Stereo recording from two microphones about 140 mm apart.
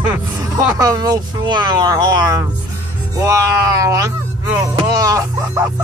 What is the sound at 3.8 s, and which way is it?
Speech, 25° right (ahead or behind).